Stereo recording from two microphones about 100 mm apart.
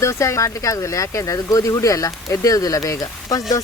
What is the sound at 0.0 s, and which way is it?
Speech, 30° left (ahead or behind).